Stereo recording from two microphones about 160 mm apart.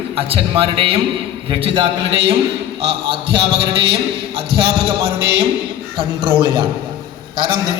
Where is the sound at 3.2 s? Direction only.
90° right.